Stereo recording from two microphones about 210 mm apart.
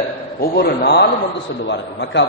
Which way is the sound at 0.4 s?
50° left (ahead or behind).